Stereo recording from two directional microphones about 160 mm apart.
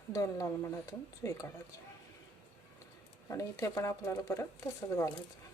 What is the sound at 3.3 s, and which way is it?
Speech, 20° left (ahead or behind).